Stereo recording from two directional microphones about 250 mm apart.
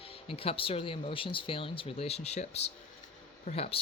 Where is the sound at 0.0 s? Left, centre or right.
Left.